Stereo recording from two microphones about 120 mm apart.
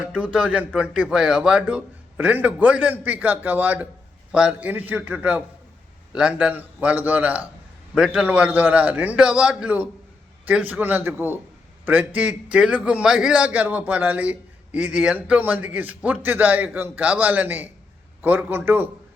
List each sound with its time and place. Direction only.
0.0 s a man's voice: 10° right (ahead or behind)